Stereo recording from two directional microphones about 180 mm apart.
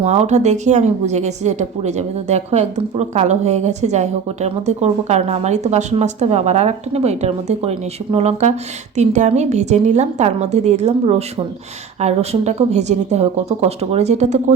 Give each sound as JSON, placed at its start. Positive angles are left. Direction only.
{"t": 0.0, "sound": "a woman's voice", "side_deg": -35}